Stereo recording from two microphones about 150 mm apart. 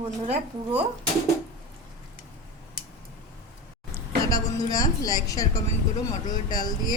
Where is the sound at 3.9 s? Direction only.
25° left (ahead or behind).